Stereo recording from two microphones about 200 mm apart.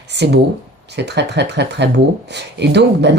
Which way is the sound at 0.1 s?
60° right (ahead or behind).